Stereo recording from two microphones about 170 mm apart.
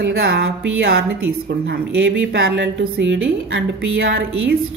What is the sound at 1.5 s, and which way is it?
A woman's voice, 90° right.